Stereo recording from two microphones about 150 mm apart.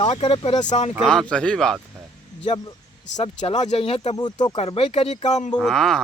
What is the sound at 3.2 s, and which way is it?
Speech, 50° left (ahead or behind).